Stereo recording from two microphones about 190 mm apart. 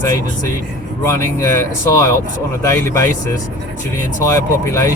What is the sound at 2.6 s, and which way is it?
Speech, 10° left (ahead or behind).